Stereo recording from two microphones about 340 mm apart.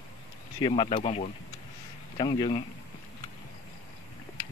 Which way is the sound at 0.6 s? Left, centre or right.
Centre.